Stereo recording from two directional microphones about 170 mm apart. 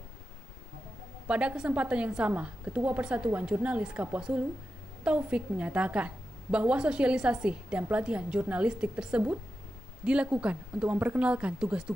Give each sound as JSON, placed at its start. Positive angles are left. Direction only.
{"t": 1.2, "sound": "a woman's voice", "side_deg": -5}